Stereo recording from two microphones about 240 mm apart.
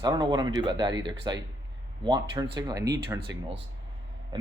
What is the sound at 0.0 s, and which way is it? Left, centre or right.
Speech, centre.